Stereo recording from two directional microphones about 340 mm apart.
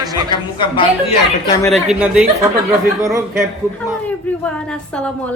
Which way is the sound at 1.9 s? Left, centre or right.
Centre.